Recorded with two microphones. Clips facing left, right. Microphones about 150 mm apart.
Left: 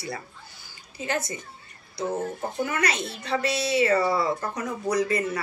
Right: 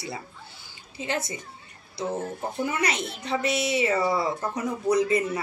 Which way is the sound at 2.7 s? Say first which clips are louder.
Even; 20° right (ahead or behind).